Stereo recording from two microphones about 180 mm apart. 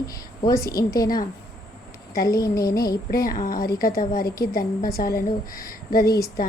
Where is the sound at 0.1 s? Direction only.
20° left (ahead or behind).